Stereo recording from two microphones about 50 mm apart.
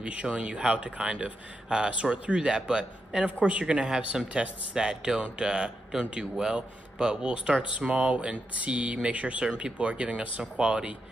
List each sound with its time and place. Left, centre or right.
0.0 s speech: right